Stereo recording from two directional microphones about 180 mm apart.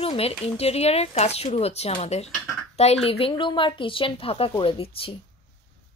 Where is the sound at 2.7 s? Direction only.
35° left (ahead or behind).